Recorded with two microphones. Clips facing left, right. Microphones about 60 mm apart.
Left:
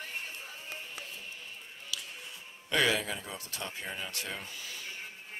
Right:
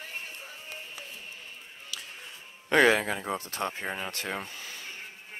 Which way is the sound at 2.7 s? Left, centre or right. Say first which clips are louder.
Right 7 dB; right.